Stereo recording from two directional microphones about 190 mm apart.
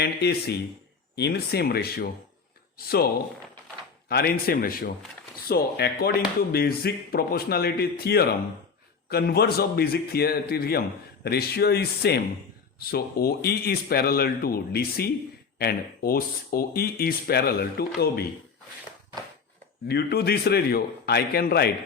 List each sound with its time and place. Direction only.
0.0 s a man's voice: 60° left (ahead or behind)
4.1 s a man's voice: 55° left (ahead or behind)
19.9 s a man's voice: 60° left (ahead or behind)